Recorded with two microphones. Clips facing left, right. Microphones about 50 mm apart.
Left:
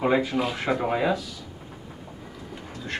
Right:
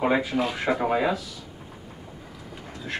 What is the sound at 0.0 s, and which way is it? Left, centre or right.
Speech, centre.